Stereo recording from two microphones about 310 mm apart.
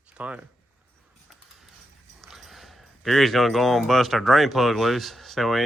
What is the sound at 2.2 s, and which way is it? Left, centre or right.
Speech, centre.